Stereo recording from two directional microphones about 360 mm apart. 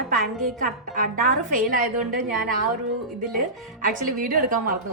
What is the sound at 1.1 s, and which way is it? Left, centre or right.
A woman's voice, right.